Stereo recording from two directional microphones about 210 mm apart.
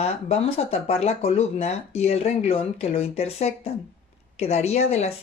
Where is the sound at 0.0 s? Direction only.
30° left (ahead or behind).